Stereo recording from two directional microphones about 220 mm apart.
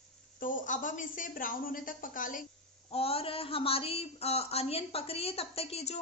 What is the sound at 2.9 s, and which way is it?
Speech, 25° left (ahead or behind).